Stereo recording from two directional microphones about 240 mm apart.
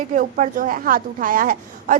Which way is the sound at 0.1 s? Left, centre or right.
Right.